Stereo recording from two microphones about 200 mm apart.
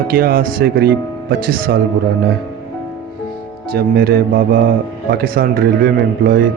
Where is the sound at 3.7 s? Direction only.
50° right (ahead or behind).